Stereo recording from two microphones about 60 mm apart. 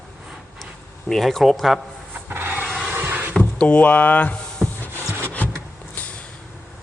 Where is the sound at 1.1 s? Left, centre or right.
Centre.